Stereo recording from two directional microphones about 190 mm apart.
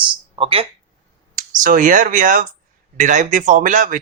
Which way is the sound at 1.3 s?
45° right (ahead or behind).